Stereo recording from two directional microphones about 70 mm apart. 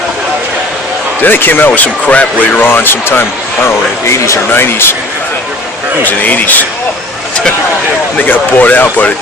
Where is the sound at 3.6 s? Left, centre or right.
Left.